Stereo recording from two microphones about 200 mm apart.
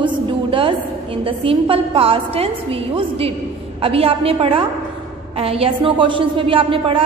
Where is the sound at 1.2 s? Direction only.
25° right (ahead or behind).